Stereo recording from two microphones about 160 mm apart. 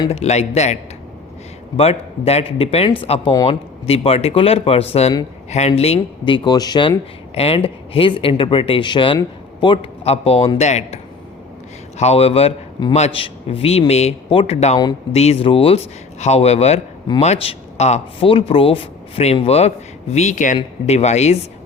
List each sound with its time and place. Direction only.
0.1 s a man's voice: 40° left (ahead or behind)